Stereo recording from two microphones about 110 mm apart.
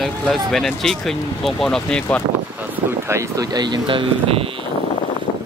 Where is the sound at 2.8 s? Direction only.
25° right (ahead or behind); by 4.4 s 55° right (ahead or behind).